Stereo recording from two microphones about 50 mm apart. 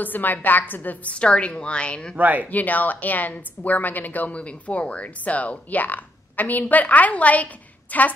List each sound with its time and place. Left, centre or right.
0.0 s a woman's voice: left
1.1 s a woman's voice: left
2.1 s speech: right
2.5 s a woman's voice: left